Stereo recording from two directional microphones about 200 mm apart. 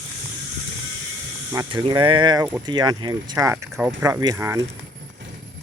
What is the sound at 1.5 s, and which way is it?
Speech, 20° right (ahead or behind).